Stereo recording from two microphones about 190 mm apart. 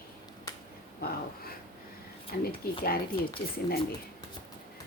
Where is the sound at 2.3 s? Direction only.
55° left (ahead or behind).